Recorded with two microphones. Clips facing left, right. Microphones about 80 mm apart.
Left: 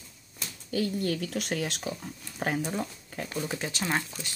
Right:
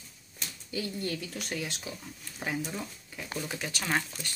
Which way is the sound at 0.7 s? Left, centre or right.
Left.